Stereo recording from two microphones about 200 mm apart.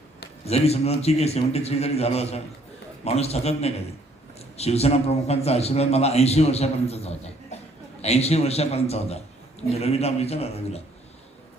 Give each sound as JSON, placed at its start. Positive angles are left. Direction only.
{"t": 0.4, "sound": "a man's voice", "side_deg": 30}